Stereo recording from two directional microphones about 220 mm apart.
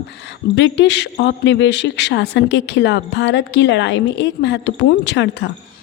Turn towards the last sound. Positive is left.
turn(degrees=55)  # may be behind; listen again after turning